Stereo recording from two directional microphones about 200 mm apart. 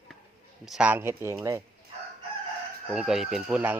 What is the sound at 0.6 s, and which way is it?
Speech, 5° right (ahead or behind).